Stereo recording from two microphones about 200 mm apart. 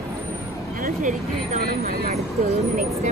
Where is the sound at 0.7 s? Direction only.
45° right (ahead or behind).